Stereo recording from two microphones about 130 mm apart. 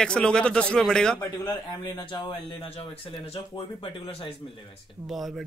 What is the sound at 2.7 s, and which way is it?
Speech, 45° left (ahead or behind).